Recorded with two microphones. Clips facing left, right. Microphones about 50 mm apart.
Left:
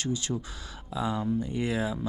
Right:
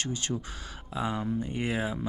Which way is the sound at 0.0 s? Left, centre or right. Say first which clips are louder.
Left 2 dB; right.